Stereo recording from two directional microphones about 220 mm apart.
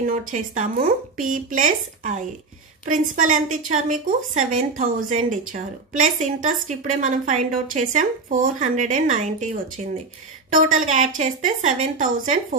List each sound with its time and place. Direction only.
0.0 s a woman's voice: 35° right (ahead or behind)